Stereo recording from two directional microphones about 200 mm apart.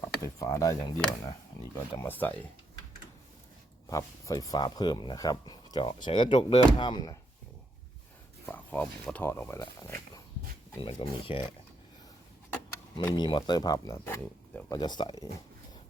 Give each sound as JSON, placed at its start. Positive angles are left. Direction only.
{"t": 0.2, "sound": "speech", "side_deg": 15}
{"t": 3.8, "sound": "speech", "side_deg": 15}
{"t": 8.4, "sound": "speech", "side_deg": 10}
{"t": 10.8, "sound": "speech", "side_deg": 25}
{"t": 13.1, "sound": "speech", "side_deg": 25}